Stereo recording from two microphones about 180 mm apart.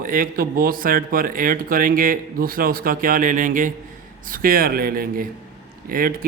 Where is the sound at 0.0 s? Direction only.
50° right (ahead or behind).